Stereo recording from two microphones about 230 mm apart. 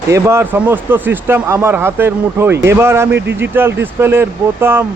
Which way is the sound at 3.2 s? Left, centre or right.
Right.